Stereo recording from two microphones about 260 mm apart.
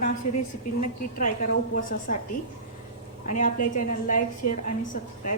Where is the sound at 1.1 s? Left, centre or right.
Left.